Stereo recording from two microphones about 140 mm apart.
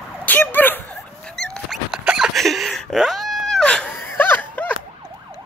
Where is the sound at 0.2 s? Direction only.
10° left (ahead or behind).